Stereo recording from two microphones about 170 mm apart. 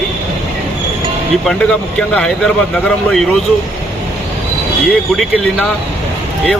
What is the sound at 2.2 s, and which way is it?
Speech, 5° left (ahead or behind).